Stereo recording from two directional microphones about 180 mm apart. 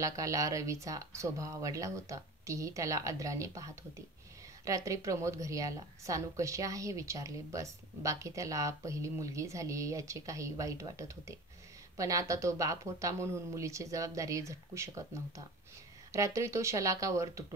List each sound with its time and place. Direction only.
0.0 s a woman's voice: 20° right (ahead or behind)